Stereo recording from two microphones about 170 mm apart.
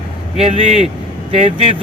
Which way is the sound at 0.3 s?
35° right (ahead or behind).